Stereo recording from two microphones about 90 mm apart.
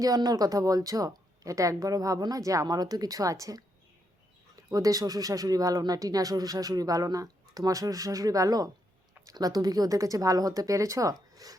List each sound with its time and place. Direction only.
0.0 s speech: 45° right (ahead or behind)